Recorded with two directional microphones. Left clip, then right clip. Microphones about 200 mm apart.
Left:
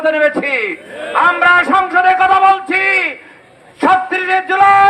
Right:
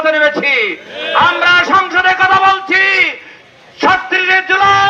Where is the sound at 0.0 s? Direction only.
55° left (ahead or behind).